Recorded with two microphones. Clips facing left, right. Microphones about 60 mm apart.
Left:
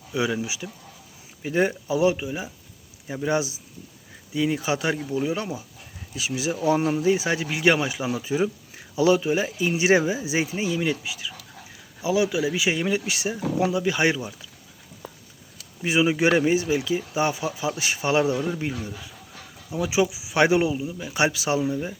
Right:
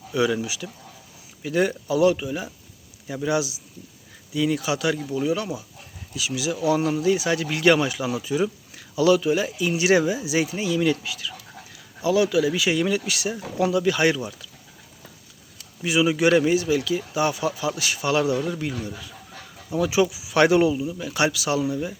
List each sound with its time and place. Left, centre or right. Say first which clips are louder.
0.1 s speech: right 3 dB; centre
3.2 s speech: even; left
15.8 s speech: right 1 dB; left
19.7 s speech: right 2 dB; centre